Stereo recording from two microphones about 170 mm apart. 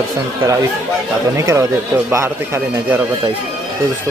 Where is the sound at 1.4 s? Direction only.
15° right (ahead or behind).